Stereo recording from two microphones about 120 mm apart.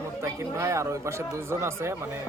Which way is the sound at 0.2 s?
25° right (ahead or behind).